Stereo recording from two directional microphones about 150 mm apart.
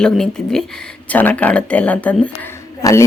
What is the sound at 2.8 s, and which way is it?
Speech, 20° left (ahead or behind).